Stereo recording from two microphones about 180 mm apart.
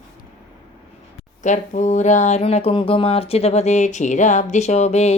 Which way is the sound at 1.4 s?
40° left (ahead or behind).